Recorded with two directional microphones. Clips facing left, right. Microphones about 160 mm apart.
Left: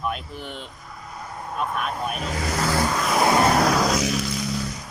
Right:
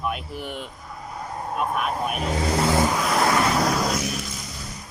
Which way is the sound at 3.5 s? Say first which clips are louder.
Left 3 dB; 80° left.